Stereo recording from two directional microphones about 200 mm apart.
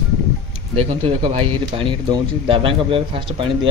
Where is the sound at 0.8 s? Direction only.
30° right (ahead or behind).